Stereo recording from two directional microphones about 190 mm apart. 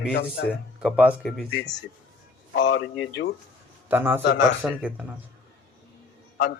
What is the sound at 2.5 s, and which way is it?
Speech, 70° left (ahead or behind).